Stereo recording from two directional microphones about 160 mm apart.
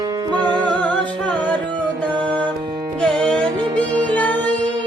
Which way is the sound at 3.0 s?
5° left (ahead or behind).